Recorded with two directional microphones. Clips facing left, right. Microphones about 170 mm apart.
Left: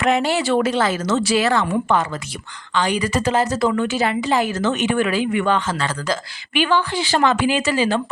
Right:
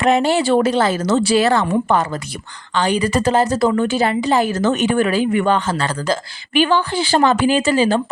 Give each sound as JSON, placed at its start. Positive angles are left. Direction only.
{"t": 0.0, "sound": "a woman's voice", "side_deg": -30}